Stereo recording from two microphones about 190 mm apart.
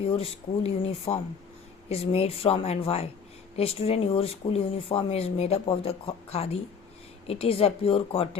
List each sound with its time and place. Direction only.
0.0 s speech: 30° left (ahead or behind)